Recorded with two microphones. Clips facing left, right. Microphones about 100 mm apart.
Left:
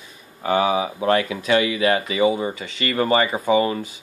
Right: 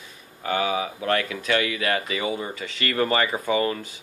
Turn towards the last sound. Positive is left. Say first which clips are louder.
# left 5 dB
turn(degrees=15)  # may be behind; listen again after turning